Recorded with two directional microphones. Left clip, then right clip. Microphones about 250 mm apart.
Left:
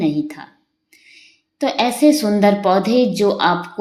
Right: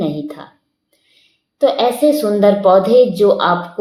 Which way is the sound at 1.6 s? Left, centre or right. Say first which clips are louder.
Right 3 dB; left.